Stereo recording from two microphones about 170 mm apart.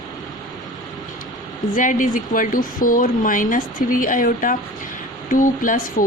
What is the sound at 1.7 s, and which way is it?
Speech, 50° left (ahead or behind).